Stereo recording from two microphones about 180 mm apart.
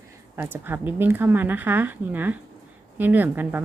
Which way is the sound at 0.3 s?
10° right (ahead or behind).